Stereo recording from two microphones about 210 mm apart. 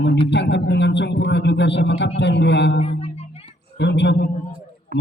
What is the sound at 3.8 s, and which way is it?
Speech, 55° left (ahead or behind).